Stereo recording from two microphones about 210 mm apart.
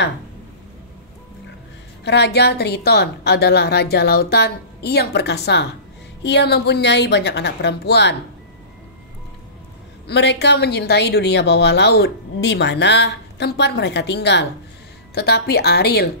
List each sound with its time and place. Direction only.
2.0 s a woman's voice: 50° left (ahead or behind)
10.0 s a woman's voice: 55° left (ahead or behind)